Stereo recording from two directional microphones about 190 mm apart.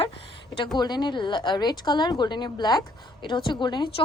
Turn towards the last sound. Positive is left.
turn(degrees=25)  # may be behind; listen again after turning